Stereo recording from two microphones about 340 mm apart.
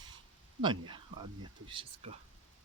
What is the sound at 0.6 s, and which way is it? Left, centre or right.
Speech, centre.